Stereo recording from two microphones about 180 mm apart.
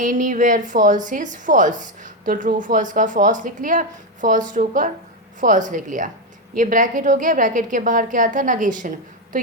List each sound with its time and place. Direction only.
0.0 s a woman's voice: 45° right (ahead or behind)